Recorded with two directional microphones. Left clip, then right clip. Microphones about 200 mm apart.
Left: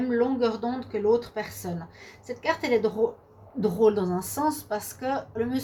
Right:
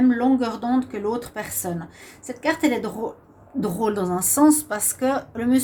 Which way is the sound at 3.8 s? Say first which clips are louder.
Left 1 dB; 40° right (ahead or behind).